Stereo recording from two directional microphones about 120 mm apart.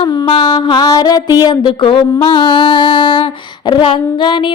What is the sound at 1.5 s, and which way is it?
Music, 40° left (ahead or behind).